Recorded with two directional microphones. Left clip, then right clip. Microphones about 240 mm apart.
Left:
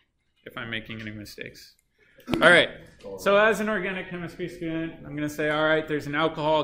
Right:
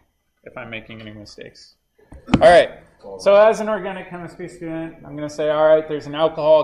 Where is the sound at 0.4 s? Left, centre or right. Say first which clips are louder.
Right 2 dB; centre.